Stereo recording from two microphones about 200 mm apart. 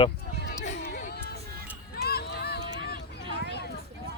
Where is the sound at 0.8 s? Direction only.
50° left (ahead or behind).